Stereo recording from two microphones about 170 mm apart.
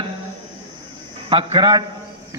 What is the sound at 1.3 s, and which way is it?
Speech, 30° right (ahead or behind).